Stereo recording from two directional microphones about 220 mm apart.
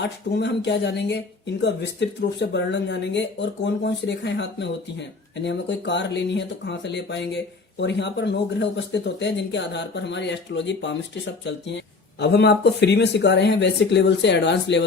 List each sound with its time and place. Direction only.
0.0 s speech: 50° left (ahead or behind)